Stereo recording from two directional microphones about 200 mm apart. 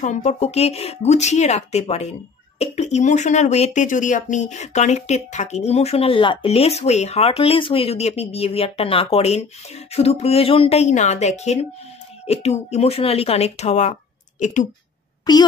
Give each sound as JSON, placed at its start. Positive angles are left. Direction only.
{"t": 0.0, "sound": "speech", "side_deg": 35}
{"t": 15.3, "sound": "a child's voice", "side_deg": 20}